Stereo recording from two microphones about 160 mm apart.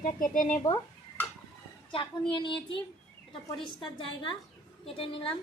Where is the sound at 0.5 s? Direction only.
20° left (ahead or behind).